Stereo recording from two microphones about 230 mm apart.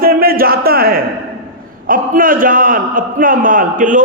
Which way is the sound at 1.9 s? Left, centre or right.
Right.